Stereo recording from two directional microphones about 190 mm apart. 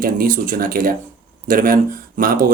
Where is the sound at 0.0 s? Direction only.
45° right (ahead or behind).